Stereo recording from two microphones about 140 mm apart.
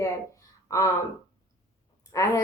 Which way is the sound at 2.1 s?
25° left (ahead or behind).